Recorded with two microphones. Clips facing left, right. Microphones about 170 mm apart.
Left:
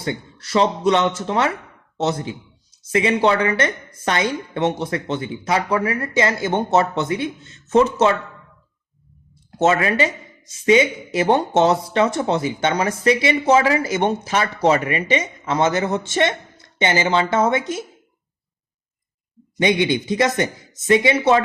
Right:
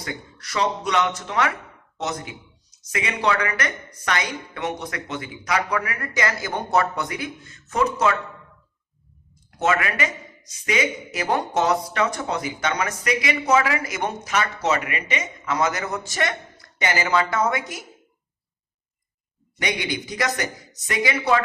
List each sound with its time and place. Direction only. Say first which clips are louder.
0.0 s speech: left 7 dB; 30° left (ahead or behind)
9.5 s speech: left 5 dB; 30° left (ahead or behind)
19.5 s speech: left 9 dB; 25° left (ahead or behind)